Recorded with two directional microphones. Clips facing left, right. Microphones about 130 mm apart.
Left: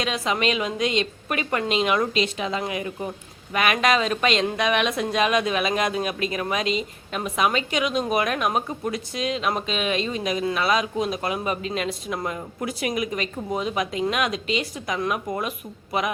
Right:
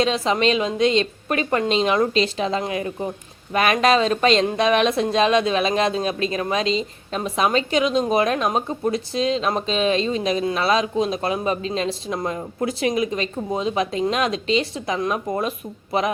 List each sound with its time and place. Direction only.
0.0 s a woman's voice: 30° right (ahead or behind)